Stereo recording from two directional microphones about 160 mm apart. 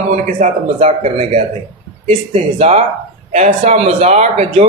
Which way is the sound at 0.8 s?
40° right (ahead or behind).